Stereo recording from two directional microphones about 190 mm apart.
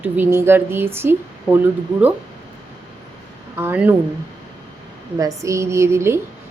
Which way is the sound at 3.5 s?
10° right (ahead or behind).